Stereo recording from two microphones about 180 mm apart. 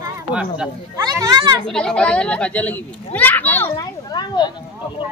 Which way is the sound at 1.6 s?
5° left (ahead or behind).